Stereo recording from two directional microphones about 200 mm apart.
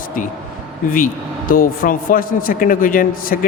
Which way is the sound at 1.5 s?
45° left (ahead or behind).